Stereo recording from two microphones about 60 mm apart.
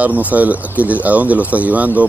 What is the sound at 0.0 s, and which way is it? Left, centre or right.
Speech, right.